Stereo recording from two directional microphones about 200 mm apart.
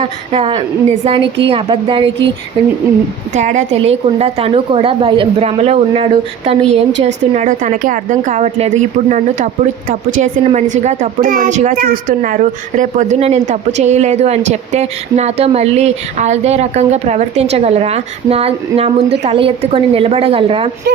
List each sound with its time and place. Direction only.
0.3 s a woman's voice: 30° right (ahead or behind)
3.3 s a child's voice: 35° right (ahead or behind)